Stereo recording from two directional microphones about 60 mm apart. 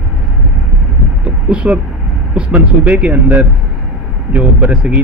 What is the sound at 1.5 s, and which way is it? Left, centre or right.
Speech, right.